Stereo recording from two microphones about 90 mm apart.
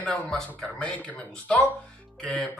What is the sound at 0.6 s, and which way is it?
Speech, 15° left (ahead or behind).